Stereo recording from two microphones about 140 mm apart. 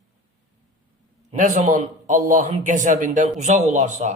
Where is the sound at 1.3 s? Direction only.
60° right (ahead or behind).